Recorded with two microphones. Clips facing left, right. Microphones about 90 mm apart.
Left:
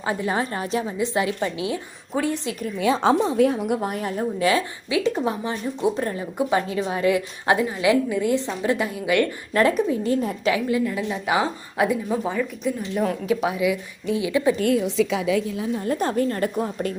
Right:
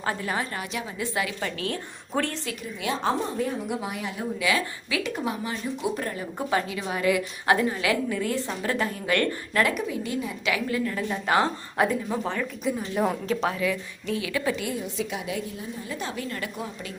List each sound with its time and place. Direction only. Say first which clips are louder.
0.0 s speech: left 4 dB; 20° left (ahead or behind)
0.9 s a woman's voice: left 3 dB; 25° left (ahead or behind)
3.0 s a woman's voice: left 8 dB; 90° left
3.8 s a woman's voice: left 6 dB; 45° left (ahead or behind)
4.9 s speech: left 8 dB; 25° left (ahead or behind)
9.6 s a woman's voice: left 6 dB; 35° left (ahead or behind)
10.5 s a woman's voice: left 3 dB; 20° left (ahead or behind)
12.6 s a woman's voice: even; 5° right (ahead or behind)
13.2 s a woman's voice: left 4 dB; 10° left (ahead or behind)
15.6 s a woman's voice: left 10 dB; 80° left
15.9 s a woman's voice: left 10 dB; 45° left (ahead or behind)